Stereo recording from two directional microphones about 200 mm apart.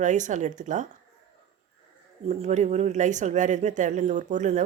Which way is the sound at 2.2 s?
35° right (ahead or behind).